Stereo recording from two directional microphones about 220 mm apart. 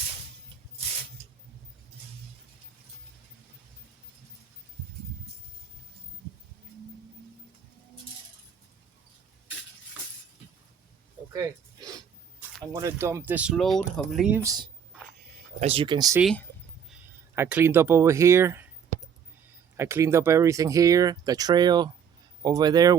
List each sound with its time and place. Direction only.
12.7 s speech: 15° right (ahead or behind)
16.2 s speech: 5° left (ahead or behind)
16.9 s speech: 10° right (ahead or behind)
19.7 s speech: 10° right (ahead or behind)